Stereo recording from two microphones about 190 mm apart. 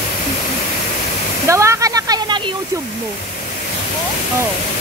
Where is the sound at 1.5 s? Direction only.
15° right (ahead or behind).